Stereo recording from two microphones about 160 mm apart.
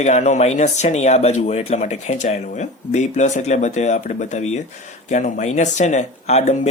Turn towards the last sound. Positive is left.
turn(degrees=45)  # may be behind; listen again after turning